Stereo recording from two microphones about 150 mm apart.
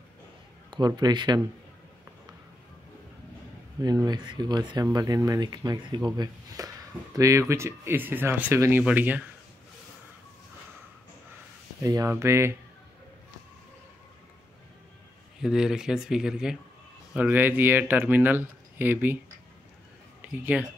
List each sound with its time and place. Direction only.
0.7 s speech: 30° right (ahead or behind)
3.8 s speech: 25° right (ahead or behind); by 9.2 s 10° right (ahead or behind)
11.8 s speech: 20° right (ahead or behind)
15.4 s speech: 5° right (ahead or behind)
20.5 s speech: 5° right (ahead or behind)